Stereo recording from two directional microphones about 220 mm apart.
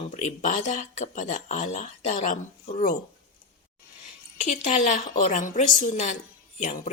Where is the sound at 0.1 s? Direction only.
35° left (ahead or behind).